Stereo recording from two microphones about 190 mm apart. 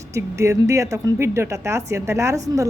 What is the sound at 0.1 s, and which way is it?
A woman's voice, 15° right (ahead or behind).